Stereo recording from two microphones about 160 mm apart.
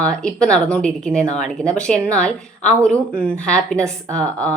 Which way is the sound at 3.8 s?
20° right (ahead or behind).